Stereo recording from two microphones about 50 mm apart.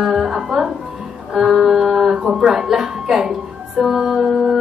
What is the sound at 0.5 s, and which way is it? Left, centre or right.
Music, centre.